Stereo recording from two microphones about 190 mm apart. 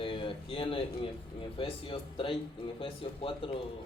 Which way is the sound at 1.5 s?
30° left (ahead or behind).